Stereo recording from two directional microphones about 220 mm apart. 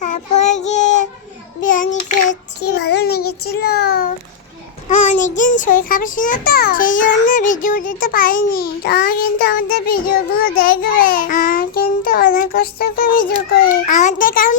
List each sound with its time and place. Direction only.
0.0 s child singing: 35° left (ahead or behind)
5.4 s a child's voice: 35° left (ahead or behind)
10.6 s child singing: 40° left (ahead or behind)